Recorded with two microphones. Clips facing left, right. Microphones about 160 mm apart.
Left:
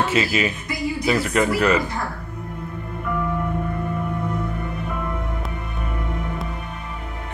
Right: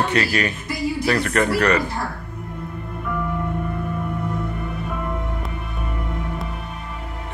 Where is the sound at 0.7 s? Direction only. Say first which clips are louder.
Right 1 dB; centre (ahead or behind).